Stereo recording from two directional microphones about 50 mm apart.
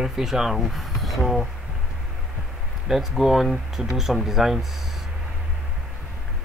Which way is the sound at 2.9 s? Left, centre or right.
Centre.